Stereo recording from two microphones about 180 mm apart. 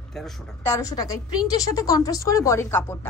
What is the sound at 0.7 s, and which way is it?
A woman's voice, 20° left (ahead or behind).